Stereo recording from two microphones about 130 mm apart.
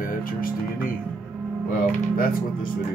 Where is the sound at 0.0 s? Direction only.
90° left.